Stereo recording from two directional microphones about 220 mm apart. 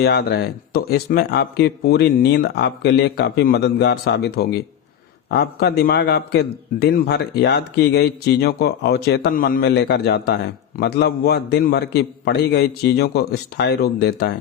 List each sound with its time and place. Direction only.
0.0 s a man's voice: 50° left (ahead or behind)